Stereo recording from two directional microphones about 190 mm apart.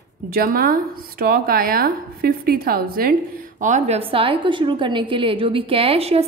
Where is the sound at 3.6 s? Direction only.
40° right (ahead or behind).